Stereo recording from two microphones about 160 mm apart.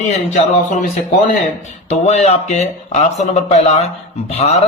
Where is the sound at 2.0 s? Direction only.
45° left (ahead or behind).